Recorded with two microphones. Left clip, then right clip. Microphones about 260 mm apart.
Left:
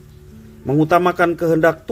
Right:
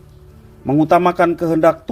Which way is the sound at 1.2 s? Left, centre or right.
Right.